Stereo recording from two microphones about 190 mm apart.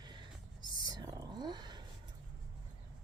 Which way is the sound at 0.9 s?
20° right (ahead or behind).